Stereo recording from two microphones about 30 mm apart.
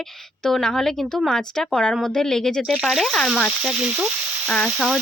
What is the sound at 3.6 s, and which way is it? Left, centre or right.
Speech, right.